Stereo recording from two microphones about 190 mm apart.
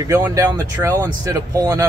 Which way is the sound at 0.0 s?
15° right (ahead or behind).